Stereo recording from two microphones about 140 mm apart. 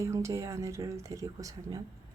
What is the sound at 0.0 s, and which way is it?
A woman's voice, 20° right (ahead or behind).